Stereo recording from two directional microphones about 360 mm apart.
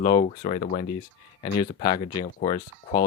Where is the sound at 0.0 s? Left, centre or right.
Centre.